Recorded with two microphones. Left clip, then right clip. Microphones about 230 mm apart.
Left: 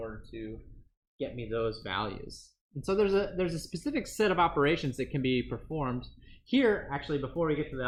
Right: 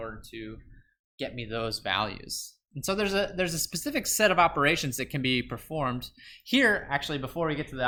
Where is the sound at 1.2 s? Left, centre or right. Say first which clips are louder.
Even; right.